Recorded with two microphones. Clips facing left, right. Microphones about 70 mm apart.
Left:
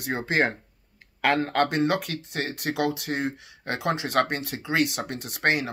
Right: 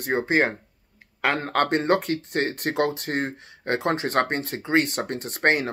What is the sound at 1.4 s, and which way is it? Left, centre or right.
Speech, right.